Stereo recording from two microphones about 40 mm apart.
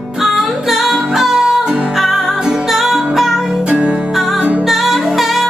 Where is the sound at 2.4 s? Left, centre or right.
Centre.